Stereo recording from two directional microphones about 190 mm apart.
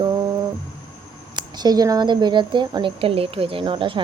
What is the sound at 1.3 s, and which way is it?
A woman's voice, 20° right (ahead or behind).